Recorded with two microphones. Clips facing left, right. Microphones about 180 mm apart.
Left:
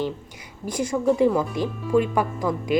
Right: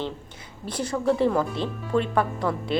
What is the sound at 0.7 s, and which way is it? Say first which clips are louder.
Speech: left 2 dB; 10° left (ahead or behind).